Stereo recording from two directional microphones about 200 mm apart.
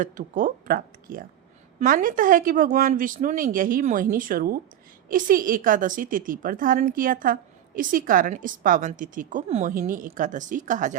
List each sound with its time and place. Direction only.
0.0 s a woman's voice: 45° right (ahead or behind)